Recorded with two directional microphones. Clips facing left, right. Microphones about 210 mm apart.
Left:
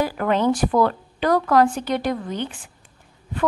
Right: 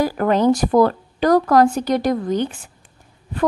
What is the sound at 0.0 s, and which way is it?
A woman's voice, 40° right (ahead or behind).